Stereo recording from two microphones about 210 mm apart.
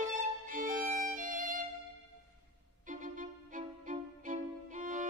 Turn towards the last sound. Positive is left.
turn(degrees=-35)  # may be behind; listen again after turning